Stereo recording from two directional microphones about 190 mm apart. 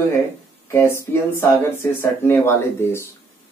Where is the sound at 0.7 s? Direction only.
15° left (ahead or behind).